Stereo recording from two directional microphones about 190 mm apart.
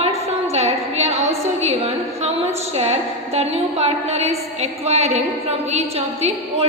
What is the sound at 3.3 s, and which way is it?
A woman's voice, 35° right (ahead or behind).